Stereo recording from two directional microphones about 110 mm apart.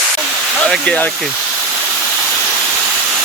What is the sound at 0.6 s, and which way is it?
Speech, 10° left (ahead or behind).